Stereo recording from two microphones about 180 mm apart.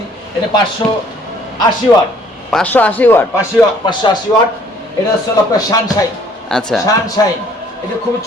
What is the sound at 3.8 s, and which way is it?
Speech, 25° left (ahead or behind).